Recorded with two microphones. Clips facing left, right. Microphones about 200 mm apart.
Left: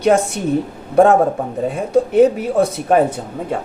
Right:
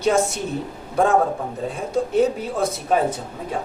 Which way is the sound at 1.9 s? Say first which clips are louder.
Left 7 dB; 60° left (ahead or behind).